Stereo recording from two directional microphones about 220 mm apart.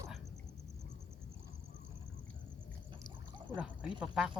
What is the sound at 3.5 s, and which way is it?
Speech, 5° right (ahead or behind).